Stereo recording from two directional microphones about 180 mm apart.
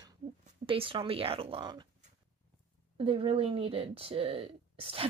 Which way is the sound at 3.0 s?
30° right (ahead or behind).